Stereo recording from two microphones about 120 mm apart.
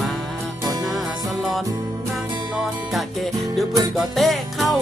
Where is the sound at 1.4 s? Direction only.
Centre (ahead or behind).